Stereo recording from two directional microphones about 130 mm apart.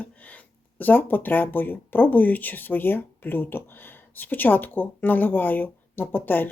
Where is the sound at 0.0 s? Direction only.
10° left (ahead or behind).